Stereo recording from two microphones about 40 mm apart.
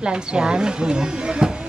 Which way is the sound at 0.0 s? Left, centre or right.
Right.